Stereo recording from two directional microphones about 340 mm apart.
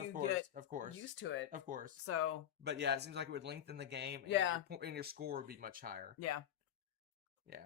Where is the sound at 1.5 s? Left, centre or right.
Right.